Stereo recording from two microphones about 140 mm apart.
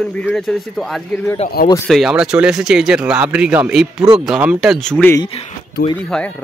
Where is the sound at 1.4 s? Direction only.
55° left (ahead or behind).